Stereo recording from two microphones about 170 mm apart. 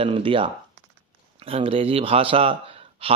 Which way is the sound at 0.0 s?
30° right (ahead or behind).